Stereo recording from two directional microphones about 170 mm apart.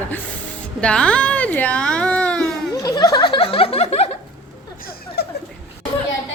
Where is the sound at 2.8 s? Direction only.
20° left (ahead or behind); by 4.1 s 35° left (ahead or behind).